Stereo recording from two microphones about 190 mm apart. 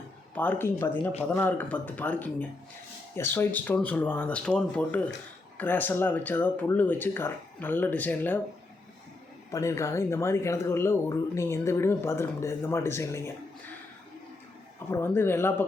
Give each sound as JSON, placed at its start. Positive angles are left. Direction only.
{"t": 0.3, "sound": "speech", "side_deg": 10}
{"t": 9.5, "sound": "speech", "side_deg": 15}
{"t": 14.8, "sound": "speech", "side_deg": 15}